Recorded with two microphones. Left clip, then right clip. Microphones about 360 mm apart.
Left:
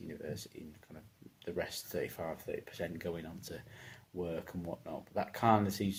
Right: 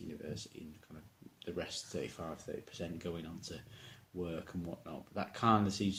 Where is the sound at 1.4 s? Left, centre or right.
Centre.